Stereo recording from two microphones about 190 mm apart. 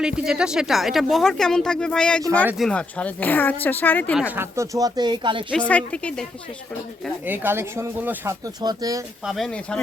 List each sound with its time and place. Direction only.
0.0 s speech: 5° right (ahead or behind)
4.2 s speech: 10° right (ahead or behind); by 5.5 s 25° right (ahead or behind)
5.5 s speech: 5° left (ahead or behind)
7.3 s speech: 10° right (ahead or behind)
9.2 s speech: centre (ahead or behind)